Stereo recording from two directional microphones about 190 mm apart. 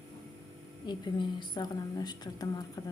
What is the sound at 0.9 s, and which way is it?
A woman's voice, 25° left (ahead or behind).